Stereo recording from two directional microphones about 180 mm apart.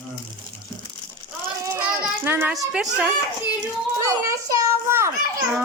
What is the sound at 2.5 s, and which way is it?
Speech, 5° right (ahead or behind).